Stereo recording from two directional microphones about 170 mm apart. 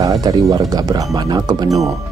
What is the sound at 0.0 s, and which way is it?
Speech, 20° right (ahead or behind).